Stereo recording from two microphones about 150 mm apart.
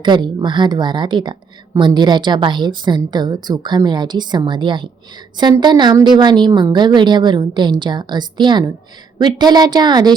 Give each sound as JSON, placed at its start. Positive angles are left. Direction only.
{"t": 0.0, "sound": "a woman's voice", "side_deg": -30}